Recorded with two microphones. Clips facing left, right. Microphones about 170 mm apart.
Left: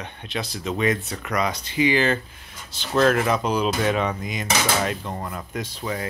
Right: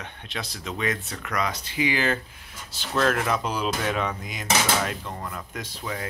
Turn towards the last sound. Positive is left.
turn(degrees=0)  # may be behind; listen again after turning